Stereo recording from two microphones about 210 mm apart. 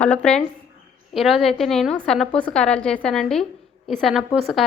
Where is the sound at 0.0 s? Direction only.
5° left (ahead or behind).